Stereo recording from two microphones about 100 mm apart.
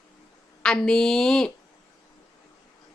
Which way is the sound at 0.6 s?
5° left (ahead or behind).